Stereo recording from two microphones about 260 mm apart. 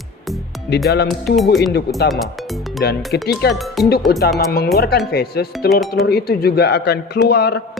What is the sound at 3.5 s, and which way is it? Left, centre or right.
Speech, centre.